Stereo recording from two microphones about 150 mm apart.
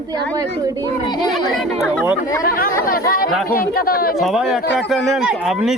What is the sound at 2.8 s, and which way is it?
Speech, 75° left (ahead or behind).